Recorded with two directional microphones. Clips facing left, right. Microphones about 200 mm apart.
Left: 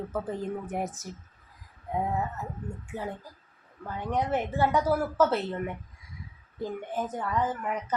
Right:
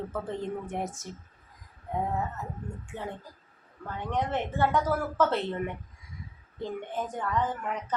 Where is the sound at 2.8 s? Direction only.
10° left (ahead or behind).